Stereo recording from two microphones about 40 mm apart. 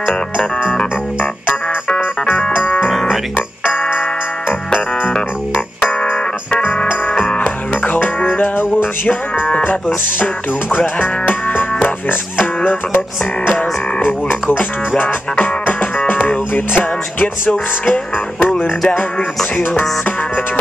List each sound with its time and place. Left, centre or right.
5.1 s music: left
7.1 s music: left
7.8 s music: left
8.4 s music: left
10.1 s music: left
10.8 s music: left
12.1 s speech: left
13.5 s music: left
15.4 s music: left
17.5 s music: left